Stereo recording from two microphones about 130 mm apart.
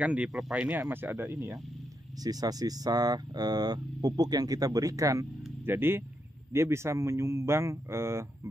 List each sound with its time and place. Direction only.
0.0 s speech: 10° right (ahead or behind)